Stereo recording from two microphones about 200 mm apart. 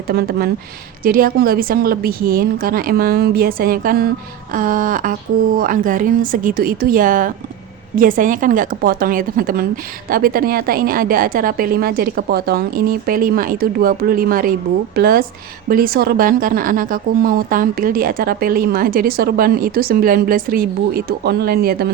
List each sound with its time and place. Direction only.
0.1 s a woman's voice: 50° right (ahead or behind)